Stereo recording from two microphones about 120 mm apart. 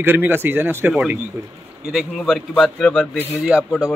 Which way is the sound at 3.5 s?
10° right (ahead or behind).